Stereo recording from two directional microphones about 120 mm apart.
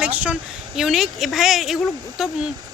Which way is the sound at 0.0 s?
10° right (ahead or behind).